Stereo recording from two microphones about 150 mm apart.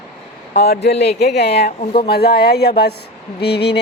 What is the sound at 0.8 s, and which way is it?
Speech, 90° left.